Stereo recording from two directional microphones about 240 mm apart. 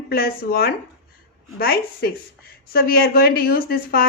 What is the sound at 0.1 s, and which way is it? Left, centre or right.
A woman's voice, left.